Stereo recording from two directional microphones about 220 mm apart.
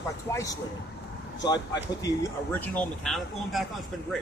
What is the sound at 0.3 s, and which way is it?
Speech, 15° left (ahead or behind).